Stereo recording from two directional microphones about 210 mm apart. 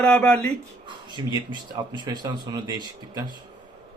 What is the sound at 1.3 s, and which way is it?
Speech, 20° right (ahead or behind).